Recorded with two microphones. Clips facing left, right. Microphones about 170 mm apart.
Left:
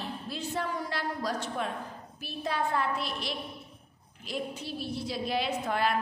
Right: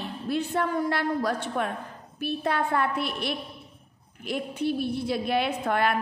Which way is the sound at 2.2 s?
60° right (ahead or behind).